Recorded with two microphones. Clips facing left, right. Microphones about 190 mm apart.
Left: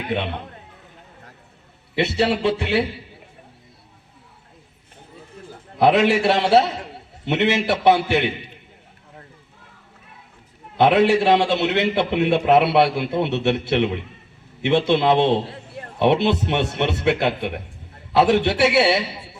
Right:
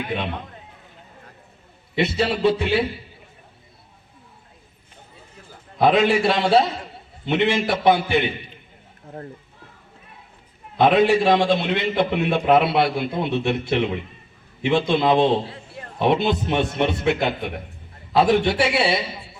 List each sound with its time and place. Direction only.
0.1 s a man's voice: 70° left (ahead or behind)
2.0 s a man's voice: 70° left (ahead or behind)
5.8 s a man's voice: 75° left (ahead or behind)
10.8 s a man's voice: 75° left (ahead or behind)